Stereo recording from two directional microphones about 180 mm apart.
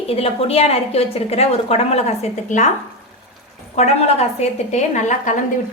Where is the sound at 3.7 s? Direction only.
35° left (ahead or behind).